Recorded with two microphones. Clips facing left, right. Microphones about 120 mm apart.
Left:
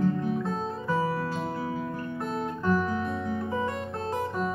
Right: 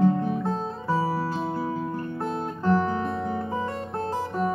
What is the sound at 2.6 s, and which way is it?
Music, 30° right (ahead or behind).